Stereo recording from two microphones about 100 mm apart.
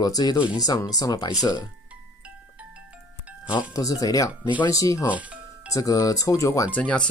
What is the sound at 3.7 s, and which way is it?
Speech, 35° left (ahead or behind).